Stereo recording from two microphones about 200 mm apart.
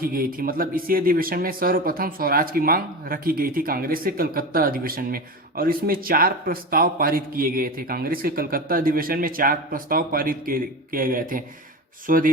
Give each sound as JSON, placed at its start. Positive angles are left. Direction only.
{"t": 0.0, "sound": "a man's voice", "side_deg": -45}